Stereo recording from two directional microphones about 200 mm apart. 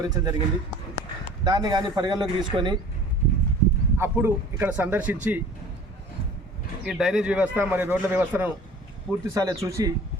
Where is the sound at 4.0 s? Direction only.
10° right (ahead or behind).